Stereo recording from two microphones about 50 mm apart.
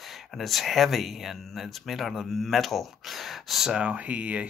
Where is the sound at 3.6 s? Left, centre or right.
Right.